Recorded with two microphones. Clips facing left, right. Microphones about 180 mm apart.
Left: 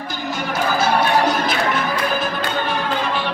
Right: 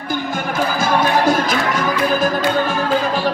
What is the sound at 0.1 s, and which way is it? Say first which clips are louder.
Music: right 4 dB; 50° right (ahead or behind).